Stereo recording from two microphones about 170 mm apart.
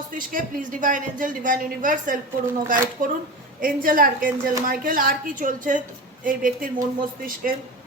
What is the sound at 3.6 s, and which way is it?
A woman's voice, 55° right (ahead or behind).